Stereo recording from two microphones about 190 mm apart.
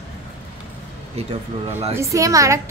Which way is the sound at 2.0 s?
15° right (ahead or behind).